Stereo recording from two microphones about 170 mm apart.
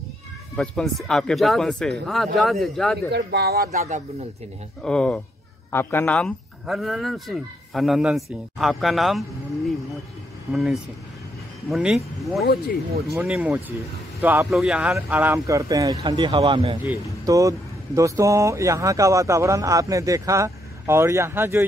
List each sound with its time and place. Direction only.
0.6 s speech: centre (ahead or behind)
3.1 s speech: 70° right (ahead or behind)
4.8 s speech: 5° left (ahead or behind)
10.5 s speech: centre (ahead or behind); by 16.7 s 35° right (ahead or behind)
16.8 s speech: 15° right (ahead or behind)